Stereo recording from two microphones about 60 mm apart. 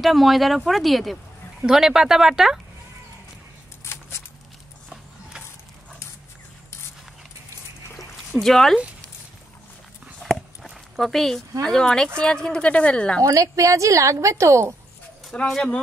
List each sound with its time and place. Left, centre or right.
0.0 s speech: centre
3.8 s a sound: left
8.4 s speech: centre
10.2 s a sound: centre
11.6 s speech: centre
13.2 s a woman's voice: right
15.4 s speech: centre